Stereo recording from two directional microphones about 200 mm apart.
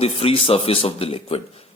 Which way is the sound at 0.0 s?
30° left (ahead or behind).